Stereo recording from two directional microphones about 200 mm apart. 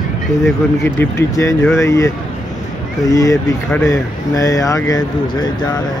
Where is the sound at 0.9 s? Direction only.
15° left (ahead or behind).